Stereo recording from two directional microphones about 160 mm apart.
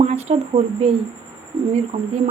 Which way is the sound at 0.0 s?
40° right (ahead or behind).